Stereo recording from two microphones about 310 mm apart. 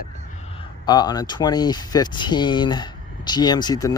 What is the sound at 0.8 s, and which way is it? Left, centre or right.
Speech, centre.